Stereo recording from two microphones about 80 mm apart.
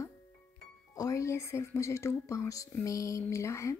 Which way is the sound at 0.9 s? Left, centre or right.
Left.